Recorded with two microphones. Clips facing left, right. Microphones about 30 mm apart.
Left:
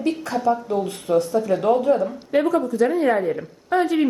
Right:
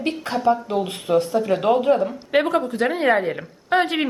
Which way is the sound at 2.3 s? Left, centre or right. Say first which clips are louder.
Left 1 dB; right.